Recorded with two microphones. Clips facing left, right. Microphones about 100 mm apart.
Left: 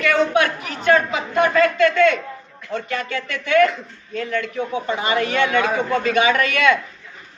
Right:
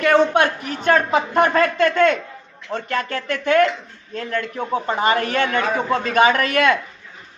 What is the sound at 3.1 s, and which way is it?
A man's voice, 45° right (ahead or behind).